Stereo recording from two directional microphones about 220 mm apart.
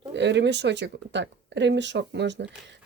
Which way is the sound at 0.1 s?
55° right (ahead or behind).